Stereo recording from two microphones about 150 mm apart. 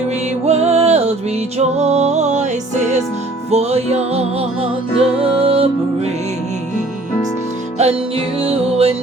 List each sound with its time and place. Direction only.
0.4 s music: 45° right (ahead or behind)
7.8 s music: 40° right (ahead or behind)